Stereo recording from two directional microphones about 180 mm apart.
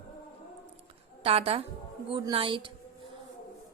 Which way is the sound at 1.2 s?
35° right (ahead or behind).